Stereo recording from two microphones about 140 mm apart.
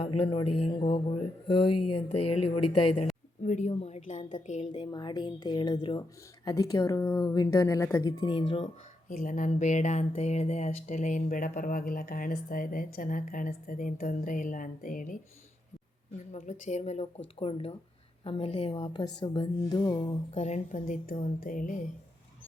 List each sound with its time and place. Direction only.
0.0 s speech: 40° left (ahead or behind)
3.4 s a woman's voice: 60° left (ahead or behind)
4.6 s speech: 35° left (ahead or behind)
8.6 s speech: 70° left (ahead or behind)
16.3 s speech: 55° left (ahead or behind); by 20.1 s 30° left (ahead or behind)
20.3 s speech: 55° left (ahead or behind); by 21.8 s 75° left (ahead or behind)